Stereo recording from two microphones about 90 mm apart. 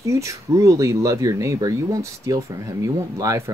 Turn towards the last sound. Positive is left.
turn(degrees=-35)  # may be behind; listen again after turning